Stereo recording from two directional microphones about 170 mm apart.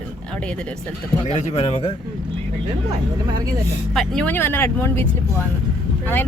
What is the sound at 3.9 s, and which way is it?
Speech, 5° left (ahead or behind).